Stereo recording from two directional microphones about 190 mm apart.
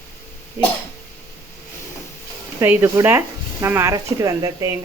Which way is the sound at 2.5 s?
10° right (ahead or behind).